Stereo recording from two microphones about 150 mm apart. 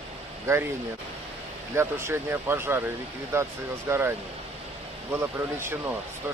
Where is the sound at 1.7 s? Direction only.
15° right (ahead or behind).